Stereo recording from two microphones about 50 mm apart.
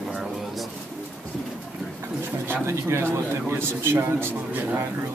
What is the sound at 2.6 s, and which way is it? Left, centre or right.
A man's voice, right.